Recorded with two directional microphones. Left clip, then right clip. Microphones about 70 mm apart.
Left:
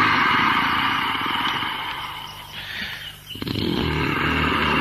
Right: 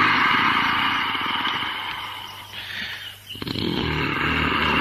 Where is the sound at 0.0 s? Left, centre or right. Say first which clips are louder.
Even; right.